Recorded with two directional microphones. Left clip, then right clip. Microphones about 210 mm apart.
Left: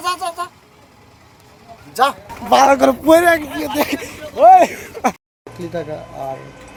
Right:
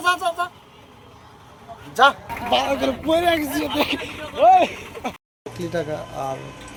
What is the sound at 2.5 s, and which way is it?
A man's voice, 30° left (ahead or behind).